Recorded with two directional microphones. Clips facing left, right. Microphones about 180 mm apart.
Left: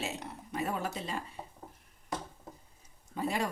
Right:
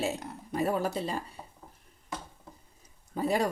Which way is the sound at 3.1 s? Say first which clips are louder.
Right 5 dB; 40° right (ahead or behind).